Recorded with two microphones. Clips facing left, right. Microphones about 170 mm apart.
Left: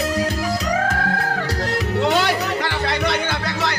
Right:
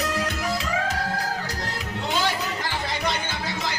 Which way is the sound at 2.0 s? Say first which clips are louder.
Left 5 dB; 75° left (ahead or behind).